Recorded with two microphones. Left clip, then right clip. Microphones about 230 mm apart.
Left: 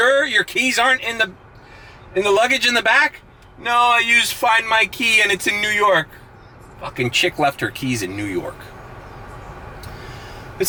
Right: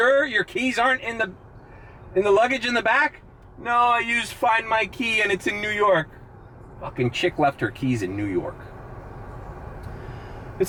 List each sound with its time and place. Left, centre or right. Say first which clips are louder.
0.0 s speech: left 4 dB; centre
9.2 s vehicle: left 4 dB; centre
9.8 s a sound: left 4 dB; centre